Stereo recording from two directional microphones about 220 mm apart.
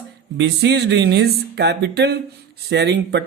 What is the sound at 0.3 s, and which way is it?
Speech, 50° right (ahead or behind).